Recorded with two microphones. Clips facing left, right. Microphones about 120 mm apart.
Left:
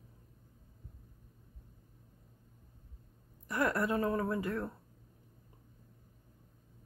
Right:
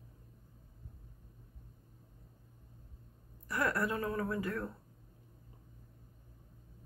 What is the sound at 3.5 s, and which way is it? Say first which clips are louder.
Speech: left 2 dB; 20° left (ahead or behind).